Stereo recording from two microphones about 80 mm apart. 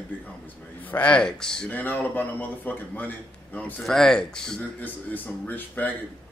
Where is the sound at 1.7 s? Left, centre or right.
Left.